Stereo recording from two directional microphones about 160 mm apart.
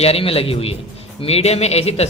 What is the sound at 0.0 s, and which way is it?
A man's voice, 35° left (ahead or behind).